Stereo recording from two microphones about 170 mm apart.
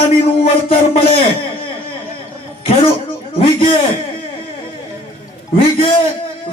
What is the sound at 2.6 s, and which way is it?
Speech, 35° left (ahead or behind).